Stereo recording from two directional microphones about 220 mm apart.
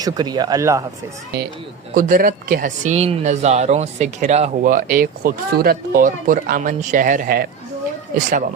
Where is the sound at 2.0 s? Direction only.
40° right (ahead or behind).